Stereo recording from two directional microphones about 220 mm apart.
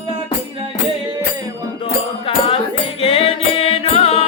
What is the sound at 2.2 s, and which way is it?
Music, 25° left (ahead or behind).